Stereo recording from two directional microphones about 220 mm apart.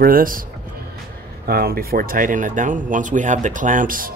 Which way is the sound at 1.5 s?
45° right (ahead or behind).